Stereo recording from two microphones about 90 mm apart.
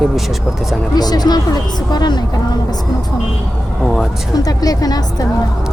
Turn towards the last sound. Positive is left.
turn(degrees=45)  # may be behind; listen again after turning